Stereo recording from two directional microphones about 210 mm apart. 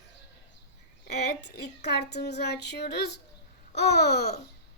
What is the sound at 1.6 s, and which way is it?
Speech, 50° left (ahead or behind).